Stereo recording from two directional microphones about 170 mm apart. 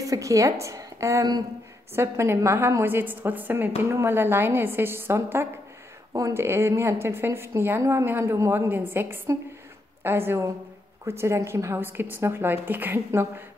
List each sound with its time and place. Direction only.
0.0 s a woman's voice: 20° right (ahead or behind)